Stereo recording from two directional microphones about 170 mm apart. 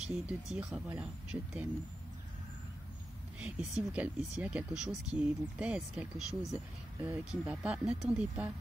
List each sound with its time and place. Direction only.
0.0 s speech: 5° right (ahead or behind)
3.3 s speech: 5° right (ahead or behind)
6.5 s speech: 15° right (ahead or behind)